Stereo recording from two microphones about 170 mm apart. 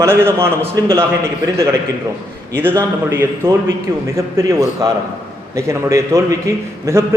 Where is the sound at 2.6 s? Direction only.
10° right (ahead or behind).